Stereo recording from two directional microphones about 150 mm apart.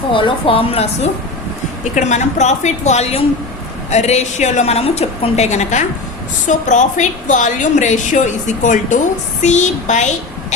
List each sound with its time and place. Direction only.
0.1 s a woman's voice: 35° left (ahead or behind); by 10.1 s 55° left (ahead or behind)